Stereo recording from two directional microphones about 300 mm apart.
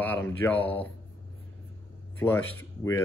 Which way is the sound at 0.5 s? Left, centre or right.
Centre.